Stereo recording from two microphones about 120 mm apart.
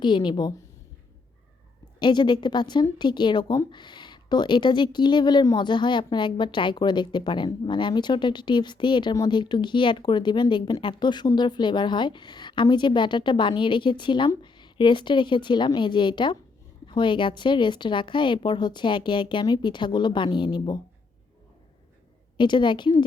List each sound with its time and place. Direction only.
0.0 s a woman's voice: 40° left (ahead or behind)
2.0 s a woman's voice: 40° left (ahead or behind)
22.4 s a woman's voice: 40° left (ahead or behind)